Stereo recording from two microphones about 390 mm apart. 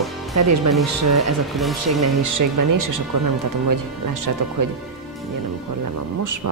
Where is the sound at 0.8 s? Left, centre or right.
Right.